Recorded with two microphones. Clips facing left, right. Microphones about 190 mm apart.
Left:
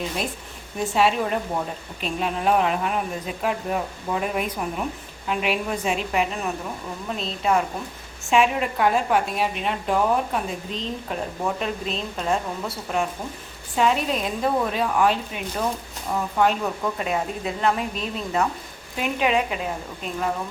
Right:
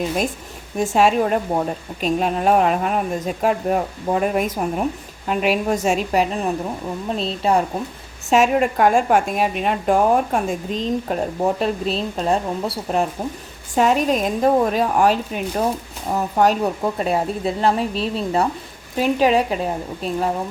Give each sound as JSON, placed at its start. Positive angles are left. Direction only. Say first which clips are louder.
{"t": 0.9, "sound": "a woman's voice", "louder": "right 5 dB", "side_deg": -45}
{"t": 8.3, "sound": "a woman's voice", "louder": "right 4 dB", "side_deg": -45}